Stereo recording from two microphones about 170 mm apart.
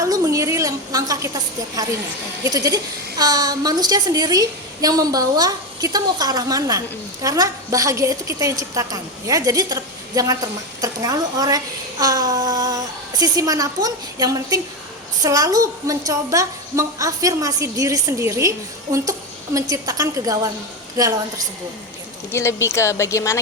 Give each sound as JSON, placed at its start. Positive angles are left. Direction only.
{"t": 0.0, "sound": "a woman's voice", "side_deg": -20}
{"t": 22.3, "sound": "speech", "side_deg": 15}